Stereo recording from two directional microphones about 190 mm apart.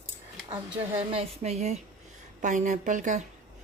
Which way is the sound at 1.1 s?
30° right (ahead or behind).